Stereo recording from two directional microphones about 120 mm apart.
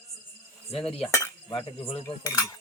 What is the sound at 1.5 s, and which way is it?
Cutlery, 55° left (ahead or behind).